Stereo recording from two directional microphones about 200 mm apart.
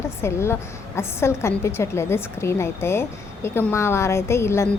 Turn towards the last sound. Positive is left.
turn(degrees=15)  # may be behind; listen again after turning